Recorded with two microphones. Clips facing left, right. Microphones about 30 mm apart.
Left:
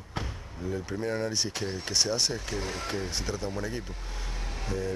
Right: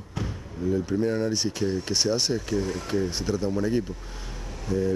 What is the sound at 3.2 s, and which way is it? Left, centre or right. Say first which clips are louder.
Speech: right 6 dB; centre.